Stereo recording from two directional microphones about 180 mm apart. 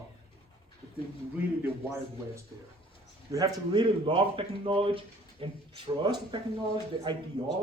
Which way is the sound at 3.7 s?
30° right (ahead or behind).